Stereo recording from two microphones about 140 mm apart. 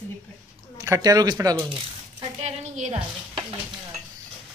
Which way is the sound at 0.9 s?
25° right (ahead or behind).